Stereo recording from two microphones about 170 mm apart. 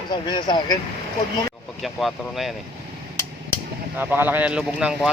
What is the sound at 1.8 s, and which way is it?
Speech, centre (ahead or behind).